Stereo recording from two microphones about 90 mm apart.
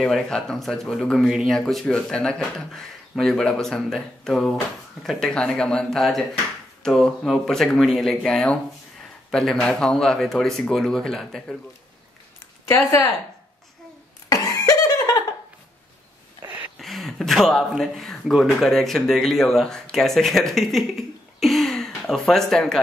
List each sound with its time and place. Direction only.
0.0 s speech: 5° left (ahead or behind)
12.6 s speech: 35° left (ahead or behind)
14.3 s a sound: 40° left (ahead or behind)
16.7 s speech: centre (ahead or behind)
21.4 s throat clearing: centre (ahead or behind)